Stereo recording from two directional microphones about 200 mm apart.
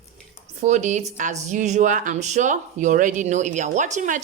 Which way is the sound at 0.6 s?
35° right (ahead or behind).